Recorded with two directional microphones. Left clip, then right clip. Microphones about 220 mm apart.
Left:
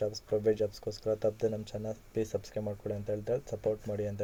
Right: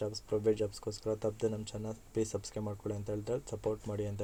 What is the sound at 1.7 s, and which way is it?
Speech, 20° right (ahead or behind).